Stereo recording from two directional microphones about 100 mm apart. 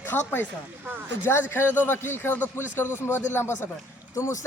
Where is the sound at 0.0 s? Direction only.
20° left (ahead or behind).